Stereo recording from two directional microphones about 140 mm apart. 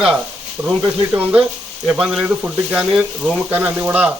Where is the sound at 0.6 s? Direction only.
20° right (ahead or behind).